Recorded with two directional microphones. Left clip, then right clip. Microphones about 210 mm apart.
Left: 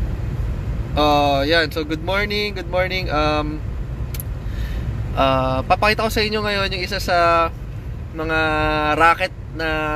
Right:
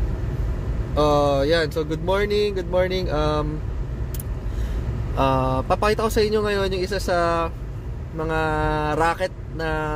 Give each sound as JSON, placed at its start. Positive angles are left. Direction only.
{"t": 0.9, "sound": "speech", "side_deg": -15}
{"t": 5.1, "sound": "speech", "side_deg": -15}